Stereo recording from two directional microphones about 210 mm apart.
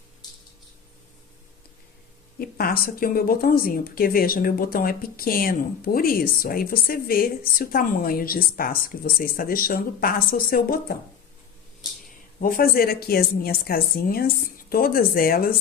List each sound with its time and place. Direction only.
2.4 s speech: 45° left (ahead or behind)
12.4 s speech: 45° left (ahead or behind)